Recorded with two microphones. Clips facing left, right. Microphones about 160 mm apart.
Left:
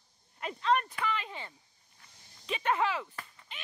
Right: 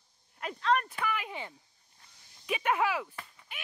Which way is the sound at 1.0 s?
10° right (ahead or behind).